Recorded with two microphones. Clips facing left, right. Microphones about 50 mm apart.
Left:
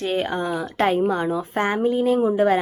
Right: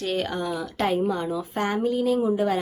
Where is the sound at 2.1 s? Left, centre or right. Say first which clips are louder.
Left 5 dB; left.